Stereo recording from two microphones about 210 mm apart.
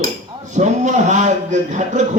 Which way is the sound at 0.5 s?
35° right (ahead or behind).